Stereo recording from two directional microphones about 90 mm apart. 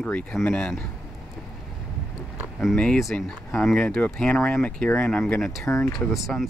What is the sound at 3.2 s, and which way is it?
Speech, 5° left (ahead or behind).